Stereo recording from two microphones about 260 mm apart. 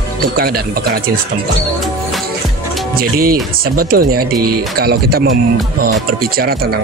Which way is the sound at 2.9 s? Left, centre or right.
Right.